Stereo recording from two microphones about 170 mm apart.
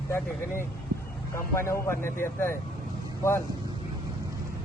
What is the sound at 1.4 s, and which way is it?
Speech, 15° left (ahead or behind).